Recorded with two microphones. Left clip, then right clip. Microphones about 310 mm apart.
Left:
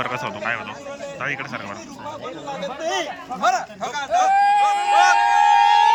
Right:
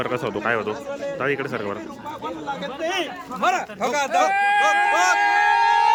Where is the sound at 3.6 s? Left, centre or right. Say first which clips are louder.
Right 4 dB; right.